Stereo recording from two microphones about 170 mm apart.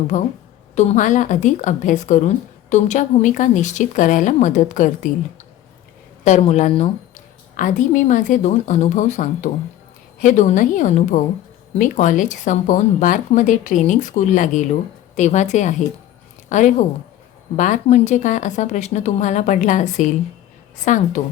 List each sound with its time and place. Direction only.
0.1 s a woman's voice: 45° left (ahead or behind)
6.4 s speech: 40° left (ahead or behind)
7.5 s a woman's voice: 50° left (ahead or behind)